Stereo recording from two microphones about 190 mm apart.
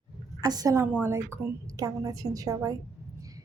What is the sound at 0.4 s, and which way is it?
A woman's voice, 20° right (ahead or behind).